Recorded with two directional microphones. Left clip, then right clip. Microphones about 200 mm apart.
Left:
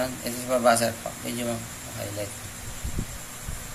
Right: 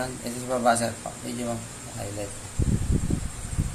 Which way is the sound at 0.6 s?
30° right (ahead or behind).